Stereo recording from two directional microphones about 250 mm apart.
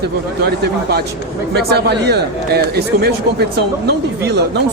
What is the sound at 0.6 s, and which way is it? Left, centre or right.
Speech, right.